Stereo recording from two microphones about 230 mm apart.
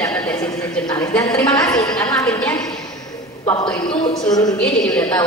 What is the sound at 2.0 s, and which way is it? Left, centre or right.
A woman's voice, centre.